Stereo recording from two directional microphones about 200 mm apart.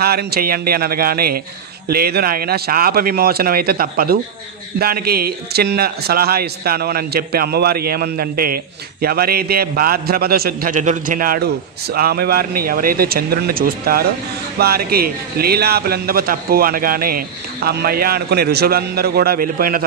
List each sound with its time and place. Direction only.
0.0 s a man's voice: 50° right (ahead or behind)